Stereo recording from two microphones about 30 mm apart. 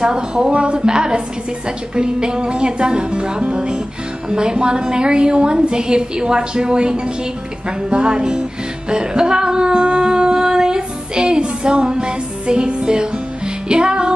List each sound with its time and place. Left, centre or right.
0.0 s a woman's voice: right
9.8 s child singing: right
13.7 s music: right